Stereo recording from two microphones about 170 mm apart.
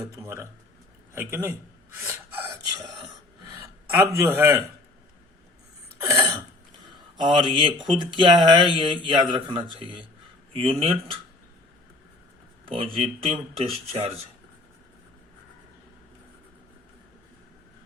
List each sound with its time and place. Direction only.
0.0 s a man's voice: 15° right (ahead or behind)
2.7 s speech: 25° right (ahead or behind)
3.9 s a man's voice: 15° right (ahead or behind)
6.0 s cough: 15° right (ahead or behind)
7.2 s speech: 25° right (ahead or behind)
12.6 s speech: 30° right (ahead or behind)